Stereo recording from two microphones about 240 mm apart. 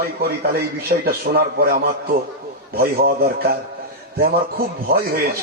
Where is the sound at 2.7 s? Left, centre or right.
Right.